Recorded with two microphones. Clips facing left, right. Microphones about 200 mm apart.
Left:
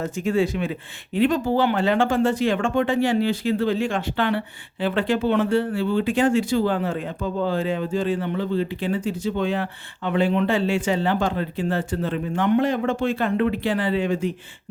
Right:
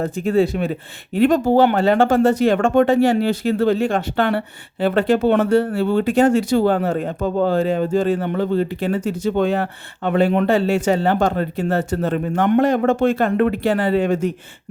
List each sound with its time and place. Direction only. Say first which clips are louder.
0.3 s speech: right 4 dB; 35° right (ahead or behind)
1.5 s speech: right 5 dB; 40° right (ahead or behind)
5.7 s speech: right 4 dB; 65° right (ahead or behind)
6.1 s speech: right 5 dB; 40° right (ahead or behind)
10.5 s speech: right 5 dB; 40° right (ahead or behind)